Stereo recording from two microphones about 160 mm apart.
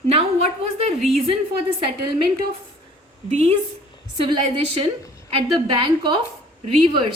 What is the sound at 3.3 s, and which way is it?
Speech, 45° right (ahead or behind).